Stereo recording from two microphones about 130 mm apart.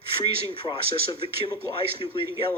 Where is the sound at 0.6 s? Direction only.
40° left (ahead or behind).